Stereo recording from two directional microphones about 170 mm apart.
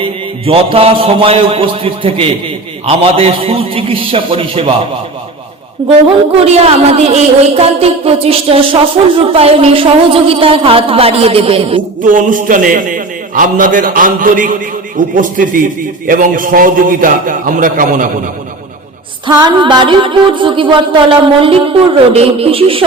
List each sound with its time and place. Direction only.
0.0 s a woman's voice: 30° right (ahead or behind)
5.8 s music: 30° right (ahead or behind)
6.4 s a woman's voice: 35° right (ahead or behind)
12.1 s a man's voice: 50° right (ahead or behind)
19.3 s music: 25° right (ahead or behind)
22.1 s a woman's voice: 35° right (ahead or behind)